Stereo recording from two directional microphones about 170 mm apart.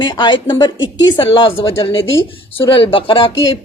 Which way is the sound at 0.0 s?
30° left (ahead or behind).